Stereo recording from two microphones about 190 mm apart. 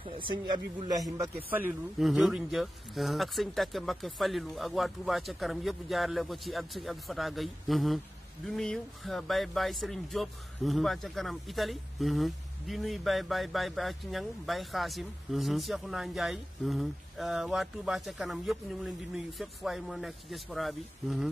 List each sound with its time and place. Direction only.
0.0 s a man's voice: 25° right (ahead or behind); by 21.3 s centre (ahead or behind)